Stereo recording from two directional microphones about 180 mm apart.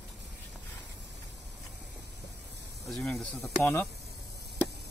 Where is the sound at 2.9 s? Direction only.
Centre (ahead or behind).